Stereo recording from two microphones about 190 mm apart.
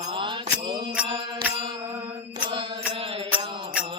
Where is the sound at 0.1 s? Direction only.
25° right (ahead or behind).